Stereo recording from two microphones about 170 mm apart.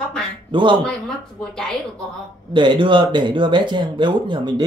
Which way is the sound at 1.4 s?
5° left (ahead or behind).